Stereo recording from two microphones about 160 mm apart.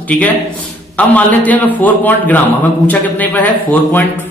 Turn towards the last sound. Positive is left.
turn(degrees=10)  # may be behind; listen again after turning